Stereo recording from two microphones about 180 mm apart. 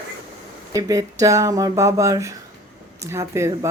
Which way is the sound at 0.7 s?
20° right (ahead or behind).